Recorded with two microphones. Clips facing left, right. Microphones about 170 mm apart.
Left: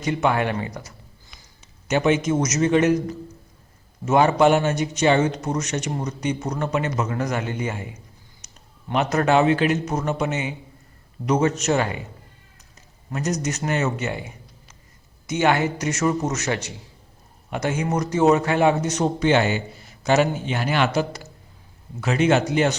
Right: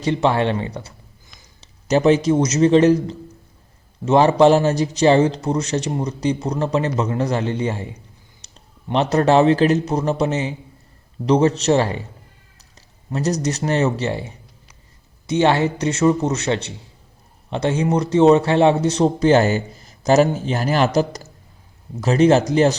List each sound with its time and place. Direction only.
0.0 s a man's voice: 30° right (ahead or behind)
8.4 s clicking: 30° right (ahead or behind)
8.9 s speech: 30° right (ahead or behind)
13.1 s a man's voice: 35° right (ahead or behind)